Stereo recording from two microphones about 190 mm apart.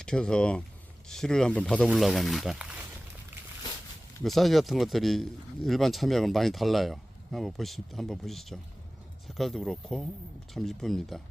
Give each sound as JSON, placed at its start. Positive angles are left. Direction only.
{"t": 0.0, "sound": "speech", "side_deg": 5}
{"t": 4.2, "sound": "speech", "side_deg": 0}